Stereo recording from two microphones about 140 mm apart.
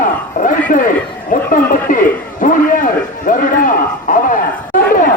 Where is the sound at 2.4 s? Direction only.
75° left (ahead or behind).